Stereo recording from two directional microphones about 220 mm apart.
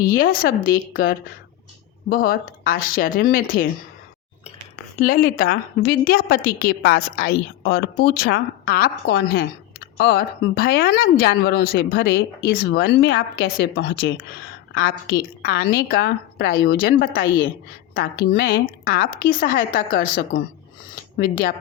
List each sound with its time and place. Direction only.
0.0 s a woman's voice: 40° left (ahead or behind)
4.9 s a woman's voice: 40° left (ahead or behind); by 14.2 s 55° left (ahead or behind)
14.8 s a woman's voice: 45° left (ahead or behind)